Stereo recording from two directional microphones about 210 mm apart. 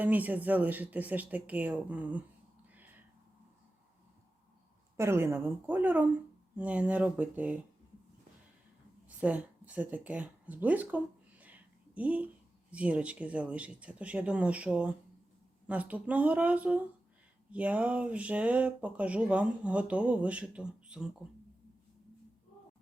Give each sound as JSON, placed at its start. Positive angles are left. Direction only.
{"t": 0.0, "sound": "speech", "side_deg": -10}
{"t": 2.7, "sound": "a sound", "side_deg": -10}
{"t": 4.9, "sound": "speech", "side_deg": -10}
{"t": 9.0, "sound": "a woman's voice", "side_deg": -5}